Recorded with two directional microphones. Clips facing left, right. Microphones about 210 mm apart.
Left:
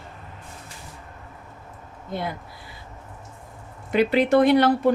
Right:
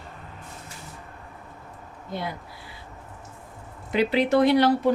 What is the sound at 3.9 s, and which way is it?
Speech, 55° left (ahead or behind).